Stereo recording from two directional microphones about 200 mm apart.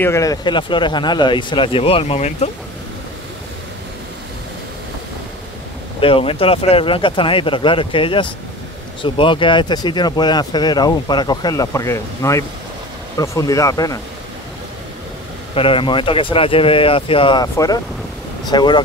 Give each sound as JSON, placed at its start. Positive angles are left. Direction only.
{"t": 0.0, "sound": "speech", "side_deg": 15}
{"t": 5.9, "sound": "speech", "side_deg": 25}
{"t": 15.5, "sound": "speech", "side_deg": 25}